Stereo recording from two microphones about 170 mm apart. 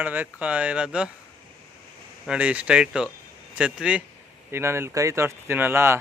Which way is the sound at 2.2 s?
5° right (ahead or behind).